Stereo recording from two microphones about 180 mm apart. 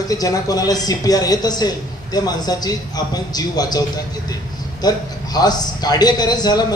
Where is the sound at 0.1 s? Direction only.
20° left (ahead or behind).